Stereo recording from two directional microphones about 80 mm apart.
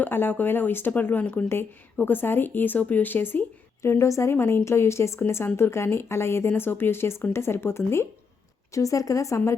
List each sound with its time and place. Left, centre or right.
0.0 s speech: left
3.8 s speech: left
8.7 s speech: left